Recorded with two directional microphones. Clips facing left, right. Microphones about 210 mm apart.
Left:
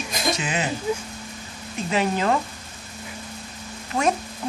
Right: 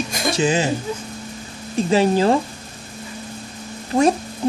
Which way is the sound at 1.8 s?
35° right (ahead or behind).